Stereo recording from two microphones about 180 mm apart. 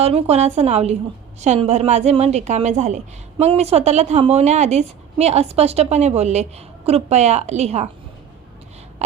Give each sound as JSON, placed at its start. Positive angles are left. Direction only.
{"t": 0.0, "sound": "a woman's voice", "side_deg": -35}
{"t": 9.0, "sound": "throat clearing", "side_deg": -40}